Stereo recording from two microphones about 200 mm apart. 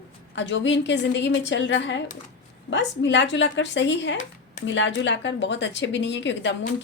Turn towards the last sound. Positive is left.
turn(degrees=65)  # may be behind; listen again after turning